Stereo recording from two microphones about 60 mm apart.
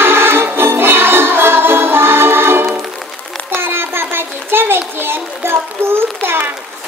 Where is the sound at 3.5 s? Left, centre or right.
Right.